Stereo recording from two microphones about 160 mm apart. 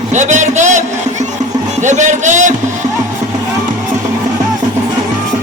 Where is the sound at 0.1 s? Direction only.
50° right (ahead or behind).